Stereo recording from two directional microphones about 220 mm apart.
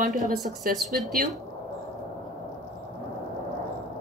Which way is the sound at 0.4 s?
Centre (ahead or behind).